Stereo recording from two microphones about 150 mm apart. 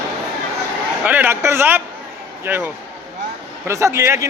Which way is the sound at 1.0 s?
10° right (ahead or behind).